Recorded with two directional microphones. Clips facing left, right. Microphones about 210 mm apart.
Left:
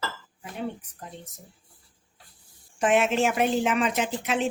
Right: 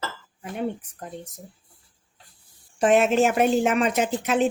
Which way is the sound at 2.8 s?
40° right (ahead or behind).